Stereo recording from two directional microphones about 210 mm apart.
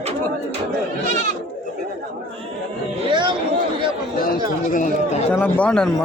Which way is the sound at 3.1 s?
20° right (ahead or behind).